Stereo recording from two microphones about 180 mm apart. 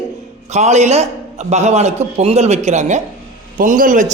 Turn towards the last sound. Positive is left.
turn(degrees=-45)  # may be behind; listen again after turning